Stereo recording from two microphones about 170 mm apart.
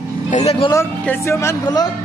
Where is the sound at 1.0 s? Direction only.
15° left (ahead or behind).